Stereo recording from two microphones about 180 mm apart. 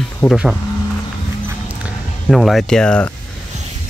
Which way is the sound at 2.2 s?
Centre (ahead or behind).